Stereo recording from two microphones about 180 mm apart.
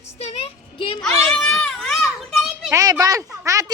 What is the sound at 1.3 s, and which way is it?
Children playing, 5° left (ahead or behind).